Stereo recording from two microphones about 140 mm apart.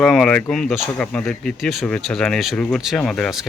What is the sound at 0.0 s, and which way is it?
Speech, 5° left (ahead or behind).